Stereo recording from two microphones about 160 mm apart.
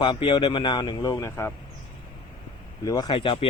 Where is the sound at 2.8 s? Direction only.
25° left (ahead or behind).